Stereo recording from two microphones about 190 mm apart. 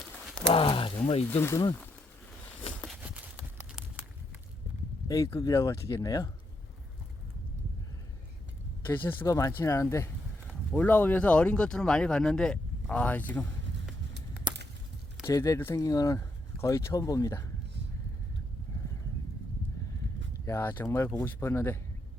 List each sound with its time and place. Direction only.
0.5 s speech: 30° left (ahead or behind)
1.3 s speech: 15° left (ahead or behind)
5.0 s speech: 20° left (ahead or behind)
8.9 s speech: 10° left (ahead or behind)
14.1 s a sound: 65° right (ahead or behind)
15.3 s speech: 15° left (ahead or behind)
20.4 s speech: 15° left (ahead or behind)